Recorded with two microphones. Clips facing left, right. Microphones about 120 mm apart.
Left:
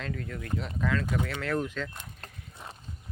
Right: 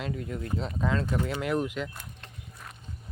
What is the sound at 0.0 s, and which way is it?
Speech, 20° right (ahead or behind).